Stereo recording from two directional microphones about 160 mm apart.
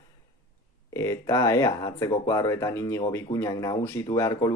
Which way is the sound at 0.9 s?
20° left (ahead or behind).